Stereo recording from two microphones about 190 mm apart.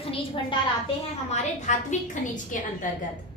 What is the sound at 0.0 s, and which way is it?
Speech, 30° left (ahead or behind).